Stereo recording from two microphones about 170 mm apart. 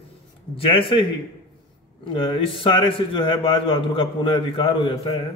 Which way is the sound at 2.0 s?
30° left (ahead or behind).